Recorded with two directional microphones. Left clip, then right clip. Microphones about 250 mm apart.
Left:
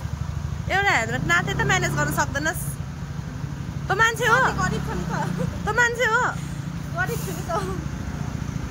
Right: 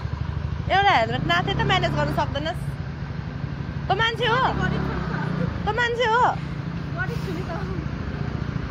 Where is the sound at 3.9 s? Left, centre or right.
Centre.